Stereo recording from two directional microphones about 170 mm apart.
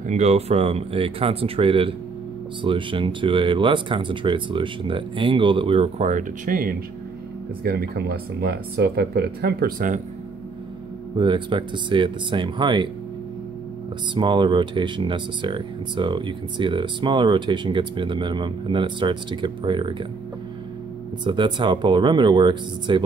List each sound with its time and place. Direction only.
0.1 s speech: 40° right (ahead or behind)
11.1 s speech: 30° right (ahead or behind)
14.1 s speech: 30° right (ahead or behind)
21.2 s speech: 30° right (ahead or behind)